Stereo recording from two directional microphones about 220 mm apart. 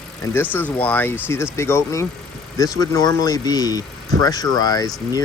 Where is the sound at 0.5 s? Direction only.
5° left (ahead or behind).